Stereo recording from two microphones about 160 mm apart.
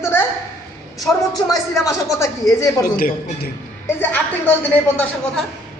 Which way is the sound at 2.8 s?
65° left (ahead or behind).